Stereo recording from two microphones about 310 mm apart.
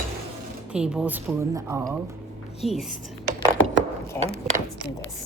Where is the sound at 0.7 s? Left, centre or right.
Centre.